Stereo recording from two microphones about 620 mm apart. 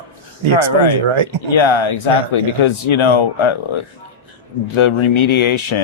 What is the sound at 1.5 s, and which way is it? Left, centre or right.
Speech, left.